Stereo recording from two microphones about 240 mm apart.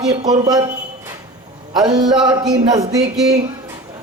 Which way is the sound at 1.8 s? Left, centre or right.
Centre.